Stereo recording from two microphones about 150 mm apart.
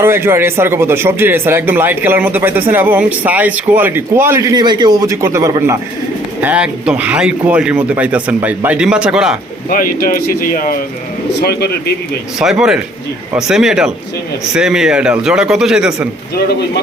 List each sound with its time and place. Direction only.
0.0 s speech: 15° right (ahead or behind)
6.4 s speech: 10° right (ahead or behind)
9.6 s speech: 70° left (ahead or behind)
12.4 s a man's voice: 5° right (ahead or behind)